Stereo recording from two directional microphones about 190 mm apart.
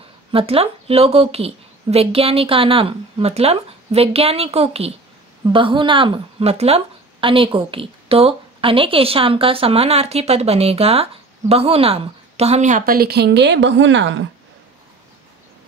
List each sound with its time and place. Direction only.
0.3 s speech: 30° right (ahead or behind); by 14.2 s 75° right (ahead or behind)